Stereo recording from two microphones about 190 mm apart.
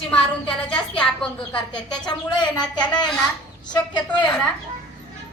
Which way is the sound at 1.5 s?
25° left (ahead or behind).